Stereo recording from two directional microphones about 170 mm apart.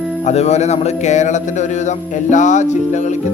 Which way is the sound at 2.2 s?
45° left (ahead or behind).